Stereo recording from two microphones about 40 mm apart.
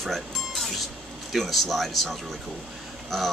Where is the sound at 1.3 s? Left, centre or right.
Centre.